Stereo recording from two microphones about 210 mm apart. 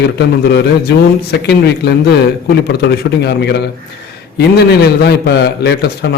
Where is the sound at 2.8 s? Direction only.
50° left (ahead or behind).